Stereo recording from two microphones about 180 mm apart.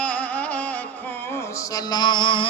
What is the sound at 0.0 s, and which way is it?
Music, 5° left (ahead or behind).